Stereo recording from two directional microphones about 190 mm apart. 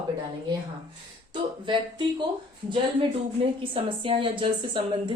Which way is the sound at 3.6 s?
25° right (ahead or behind).